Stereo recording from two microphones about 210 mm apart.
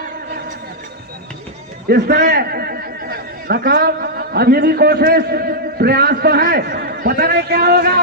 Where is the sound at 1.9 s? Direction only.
50° right (ahead or behind).